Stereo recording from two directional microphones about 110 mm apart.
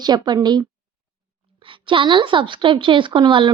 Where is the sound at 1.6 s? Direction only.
50° right (ahead or behind).